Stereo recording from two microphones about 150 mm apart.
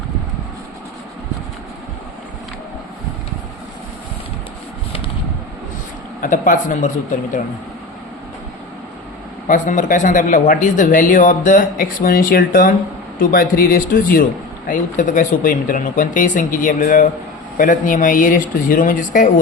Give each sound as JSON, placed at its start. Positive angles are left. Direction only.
{"t": 6.2, "sound": "speech", "side_deg": 60}
{"t": 9.5, "sound": "speech", "side_deg": 60}